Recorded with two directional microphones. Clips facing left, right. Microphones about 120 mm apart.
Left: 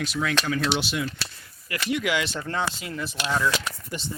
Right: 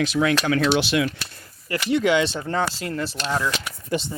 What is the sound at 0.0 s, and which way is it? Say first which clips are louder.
Speech: right 6 dB; 80° right.